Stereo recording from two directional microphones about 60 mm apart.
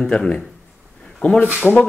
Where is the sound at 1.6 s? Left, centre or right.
Centre.